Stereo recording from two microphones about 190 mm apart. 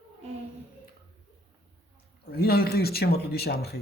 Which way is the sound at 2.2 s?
55° left (ahead or behind).